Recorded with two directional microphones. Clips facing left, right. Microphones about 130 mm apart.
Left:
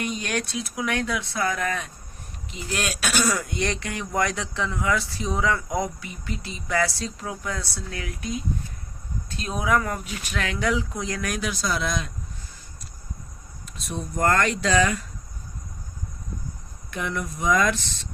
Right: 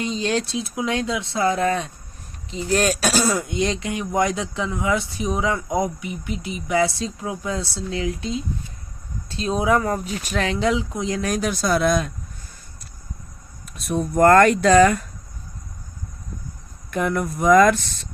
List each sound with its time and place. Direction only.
0.0 s speech: 25° right (ahead or behind)
11.3 s speech: 45° right (ahead or behind)
13.7 s speech: 60° right (ahead or behind)
16.9 s speech: 50° right (ahead or behind)